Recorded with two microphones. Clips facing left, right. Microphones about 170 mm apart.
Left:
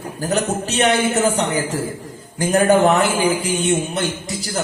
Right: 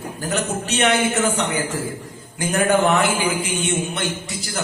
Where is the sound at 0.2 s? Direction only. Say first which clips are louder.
Left 4 dB; 40° left (ahead or behind).